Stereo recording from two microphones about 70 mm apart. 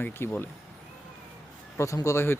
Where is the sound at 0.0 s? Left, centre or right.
Left.